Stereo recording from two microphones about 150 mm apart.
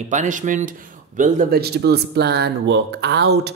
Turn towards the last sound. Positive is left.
turn(degrees=-90)